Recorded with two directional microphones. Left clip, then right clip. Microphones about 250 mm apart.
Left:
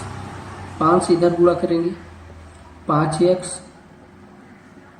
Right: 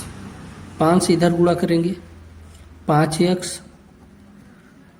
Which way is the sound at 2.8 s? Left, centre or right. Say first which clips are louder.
Left 1 dB; right.